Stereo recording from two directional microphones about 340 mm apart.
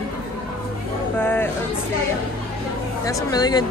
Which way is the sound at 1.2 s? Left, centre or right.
Centre.